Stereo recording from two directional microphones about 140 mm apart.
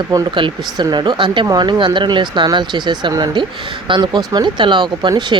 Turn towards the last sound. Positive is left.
turn(degrees=-30)  # may be behind; listen again after turning